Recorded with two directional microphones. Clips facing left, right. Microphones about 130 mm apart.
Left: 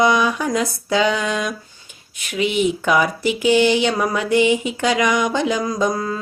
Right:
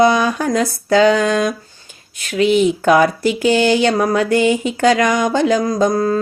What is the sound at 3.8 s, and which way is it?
A woman's voice, 40° right (ahead or behind).